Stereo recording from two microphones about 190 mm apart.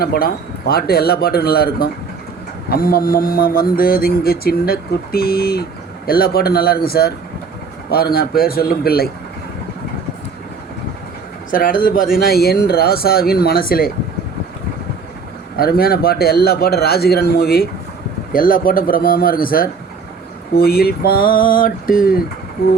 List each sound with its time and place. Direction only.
0.0 s speech: 55° left (ahead or behind)
11.5 s speech: 45° left (ahead or behind)
15.5 s a man's voice: 55° left (ahead or behind)